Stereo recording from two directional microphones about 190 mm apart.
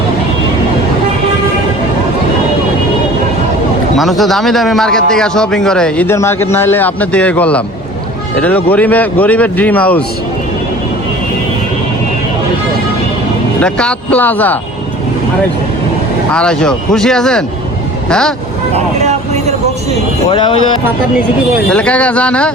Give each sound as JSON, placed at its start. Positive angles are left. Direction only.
{"t": 3.9, "sound": "a man's voice", "side_deg": 0}
{"t": 13.6, "sound": "a man's voice", "side_deg": 5}
{"t": 16.3, "sound": "a man's voice", "side_deg": 5}
{"t": 18.7, "sound": "vehicle", "side_deg": -35}
{"t": 20.3, "sound": "speech", "side_deg": 25}
{"t": 21.7, "sound": "a man's voice", "side_deg": 5}